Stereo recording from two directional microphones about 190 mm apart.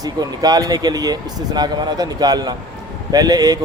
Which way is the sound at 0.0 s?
20° right (ahead or behind).